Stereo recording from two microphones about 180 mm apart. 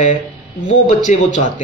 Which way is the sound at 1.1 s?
40° left (ahead or behind).